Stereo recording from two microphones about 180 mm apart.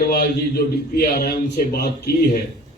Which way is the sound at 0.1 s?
65° left (ahead or behind).